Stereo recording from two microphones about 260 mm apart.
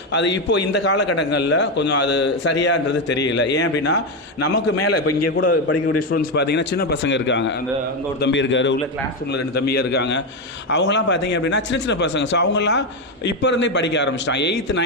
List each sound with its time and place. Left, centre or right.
0.1 s a man's voice: left
6.1 s a man's voice: left